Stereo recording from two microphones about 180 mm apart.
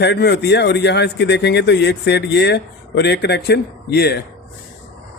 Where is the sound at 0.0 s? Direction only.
70° left (ahead or behind).